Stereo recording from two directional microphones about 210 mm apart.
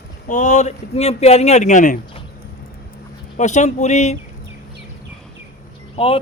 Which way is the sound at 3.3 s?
35° left (ahead or behind).